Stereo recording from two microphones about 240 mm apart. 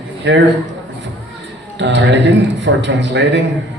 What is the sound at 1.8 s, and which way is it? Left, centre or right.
A man's voice, right.